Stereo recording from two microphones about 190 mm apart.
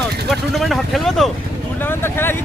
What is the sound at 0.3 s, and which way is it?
Speech, centre (ahead or behind).